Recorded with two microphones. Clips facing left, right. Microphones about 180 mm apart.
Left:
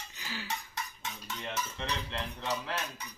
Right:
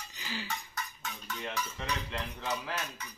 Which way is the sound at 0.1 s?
Centre (ahead or behind).